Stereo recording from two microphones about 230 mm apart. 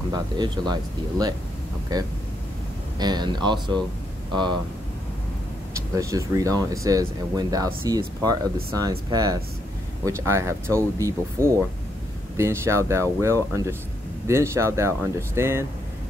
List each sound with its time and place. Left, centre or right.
0.1 s speech: centre
3.0 s speech: centre
5.8 s speech: centre